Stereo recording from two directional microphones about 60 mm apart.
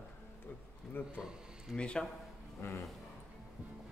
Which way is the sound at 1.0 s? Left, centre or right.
Left.